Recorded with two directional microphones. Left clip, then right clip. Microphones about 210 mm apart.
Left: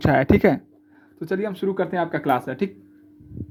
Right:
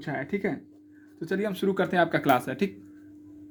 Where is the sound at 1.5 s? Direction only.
10° left (ahead or behind).